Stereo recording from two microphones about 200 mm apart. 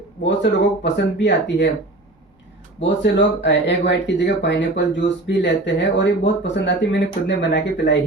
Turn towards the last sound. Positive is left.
turn(degrees=60)  # may be behind; listen again after turning